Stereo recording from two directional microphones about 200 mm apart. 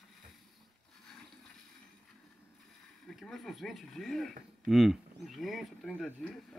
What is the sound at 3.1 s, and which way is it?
Speech, centre (ahead or behind).